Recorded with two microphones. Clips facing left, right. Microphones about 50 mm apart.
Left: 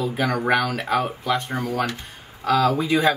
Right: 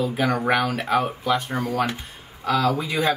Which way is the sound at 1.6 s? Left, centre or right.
Centre.